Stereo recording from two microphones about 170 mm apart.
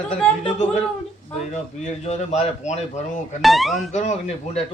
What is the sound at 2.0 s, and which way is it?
Speech, 40° left (ahead or behind).